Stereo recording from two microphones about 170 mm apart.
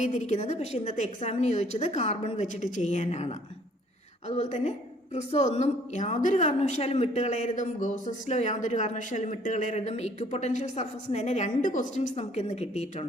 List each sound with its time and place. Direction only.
0.0 s a woman's voice: 45° left (ahead or behind)